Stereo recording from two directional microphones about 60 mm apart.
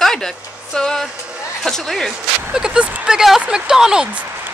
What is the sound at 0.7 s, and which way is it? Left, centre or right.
Speech, centre.